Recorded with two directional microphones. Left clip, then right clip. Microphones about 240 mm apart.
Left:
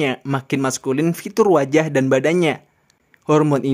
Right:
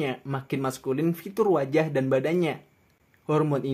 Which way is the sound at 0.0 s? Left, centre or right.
Left.